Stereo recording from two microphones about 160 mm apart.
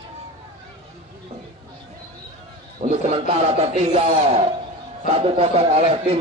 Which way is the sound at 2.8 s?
40° right (ahead or behind).